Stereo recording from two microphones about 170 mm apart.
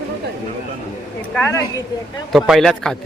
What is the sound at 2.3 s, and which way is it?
Speech, centre (ahead or behind).